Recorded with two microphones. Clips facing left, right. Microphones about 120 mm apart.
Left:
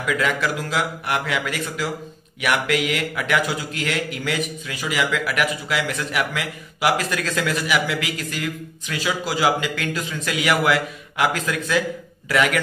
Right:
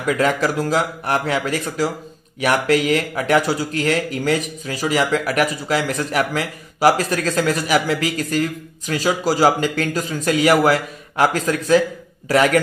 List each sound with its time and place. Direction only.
0.0 s speech: 40° right (ahead or behind)